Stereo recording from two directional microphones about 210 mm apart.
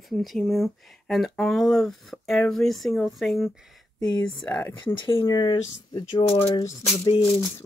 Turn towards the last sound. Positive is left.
turn(degrees=25)  # may be behind; listen again after turning